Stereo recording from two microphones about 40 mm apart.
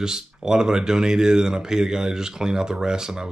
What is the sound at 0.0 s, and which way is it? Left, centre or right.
Speech, centre.